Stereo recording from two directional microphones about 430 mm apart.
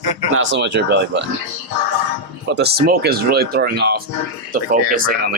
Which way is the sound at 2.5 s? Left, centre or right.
Right.